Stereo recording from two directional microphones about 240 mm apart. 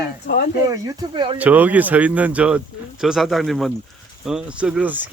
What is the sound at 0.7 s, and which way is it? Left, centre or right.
Speech, centre.